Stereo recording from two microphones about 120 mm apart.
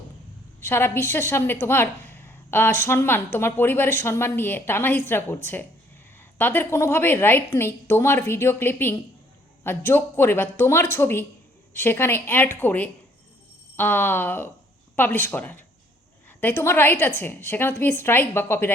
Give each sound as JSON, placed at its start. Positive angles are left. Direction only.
{"t": 0.6, "sound": "a woman's voice", "side_deg": 20}